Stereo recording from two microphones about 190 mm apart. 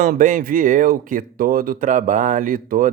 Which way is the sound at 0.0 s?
45° right (ahead or behind).